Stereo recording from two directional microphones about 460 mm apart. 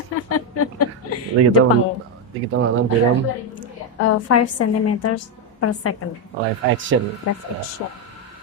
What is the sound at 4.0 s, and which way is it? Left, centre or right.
A woman's voice, left.